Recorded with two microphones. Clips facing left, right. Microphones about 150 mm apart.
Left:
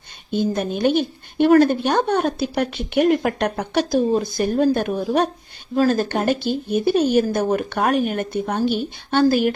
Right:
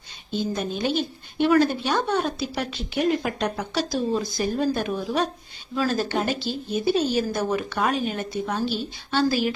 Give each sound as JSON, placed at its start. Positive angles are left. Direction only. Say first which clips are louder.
{"t": 0.3, "sound": "a woman's voice", "louder": "left 5 dB", "side_deg": 55}